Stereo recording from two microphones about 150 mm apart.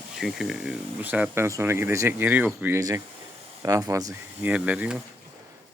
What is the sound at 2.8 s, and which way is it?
Speech, 25° right (ahead or behind).